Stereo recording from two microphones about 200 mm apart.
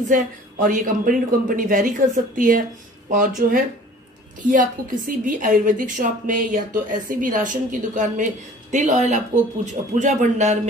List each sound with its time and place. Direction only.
0.1 s a woman's voice: 40° right (ahead or behind)